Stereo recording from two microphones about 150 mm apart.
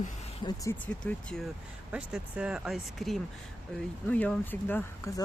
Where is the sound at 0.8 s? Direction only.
10° left (ahead or behind).